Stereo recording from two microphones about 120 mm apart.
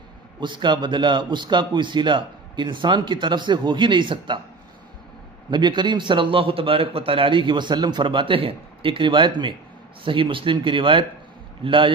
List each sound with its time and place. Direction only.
0.4 s a man's voice: 40° right (ahead or behind)
5.5 s a man's voice: 40° right (ahead or behind)